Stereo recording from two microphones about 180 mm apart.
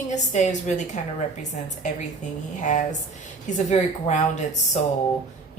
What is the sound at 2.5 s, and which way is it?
A woman's voice, 45° left (ahead or behind).